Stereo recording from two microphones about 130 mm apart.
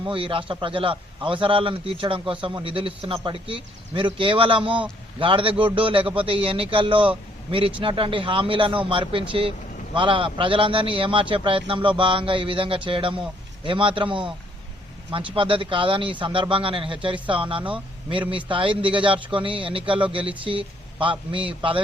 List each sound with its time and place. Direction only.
0.0 s a man's voice: 40° right (ahead or behind)